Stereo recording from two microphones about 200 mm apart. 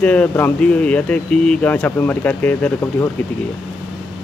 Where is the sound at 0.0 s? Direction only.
5° left (ahead or behind).